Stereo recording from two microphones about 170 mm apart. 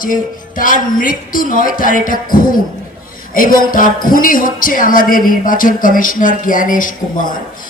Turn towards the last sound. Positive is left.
turn(degrees=50)  # may be behind; listen again after turning